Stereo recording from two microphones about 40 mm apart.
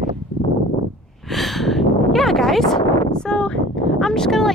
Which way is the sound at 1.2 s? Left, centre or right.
Centre.